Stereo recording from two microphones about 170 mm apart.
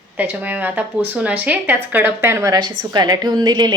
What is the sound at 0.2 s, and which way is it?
A woman's voice, 10° right (ahead or behind).